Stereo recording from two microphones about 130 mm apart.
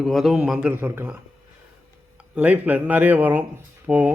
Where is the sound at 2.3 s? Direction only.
10° right (ahead or behind).